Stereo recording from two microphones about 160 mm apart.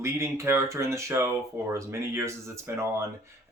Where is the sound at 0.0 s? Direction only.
15° right (ahead or behind).